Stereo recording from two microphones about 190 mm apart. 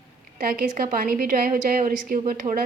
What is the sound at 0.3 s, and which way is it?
A woman's voice, 50° right (ahead or behind).